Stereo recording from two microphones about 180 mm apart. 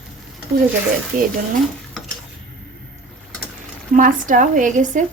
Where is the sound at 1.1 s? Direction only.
45° right (ahead or behind).